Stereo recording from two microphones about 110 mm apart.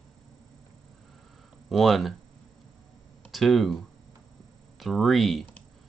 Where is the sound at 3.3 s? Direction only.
Centre (ahead or behind).